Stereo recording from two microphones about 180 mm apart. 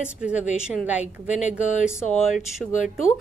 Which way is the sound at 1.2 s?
40° left (ahead or behind).